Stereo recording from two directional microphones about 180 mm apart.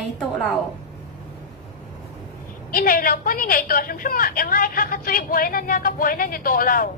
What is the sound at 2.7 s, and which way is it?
A woman's voice, 55° left (ahead or behind).